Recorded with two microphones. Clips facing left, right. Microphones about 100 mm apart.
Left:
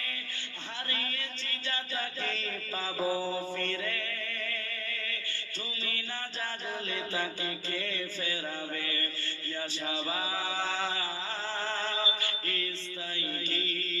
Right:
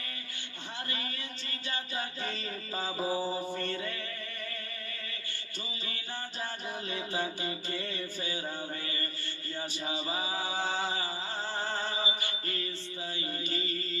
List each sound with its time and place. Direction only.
0.9 s a sound: 15° right (ahead or behind)
1.6 s mantra: 10° right (ahead or behind)
4.4 s music: 20° right (ahead or behind)
6.9 s music: 15° right (ahead or behind)
9.8 s music: 10° right (ahead or behind)
11.6 s mantra: 10° right (ahead or behind)
13.5 s a sound: 15° right (ahead or behind)